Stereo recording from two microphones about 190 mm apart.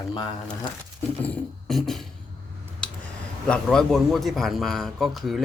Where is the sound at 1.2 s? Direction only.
5° left (ahead or behind).